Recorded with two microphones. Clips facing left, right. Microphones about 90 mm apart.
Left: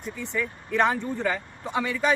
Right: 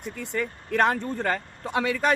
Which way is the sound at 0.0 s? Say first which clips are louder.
Even; 60° right (ahead or behind).